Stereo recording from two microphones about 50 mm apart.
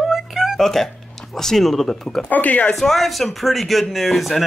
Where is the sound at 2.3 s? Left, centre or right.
Left.